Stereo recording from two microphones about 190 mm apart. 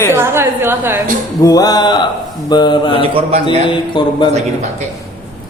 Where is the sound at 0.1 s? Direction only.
15° right (ahead or behind).